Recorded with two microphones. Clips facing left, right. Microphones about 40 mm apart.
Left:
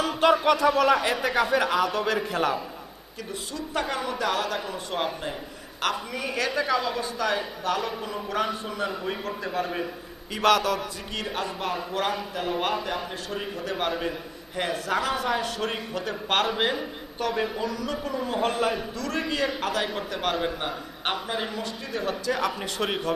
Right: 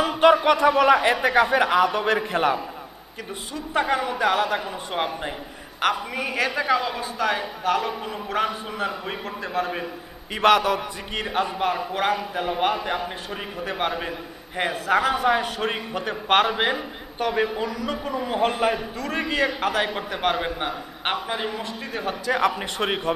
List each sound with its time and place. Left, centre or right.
0.0 s a man's voice: right
10.3 s a man's voice: right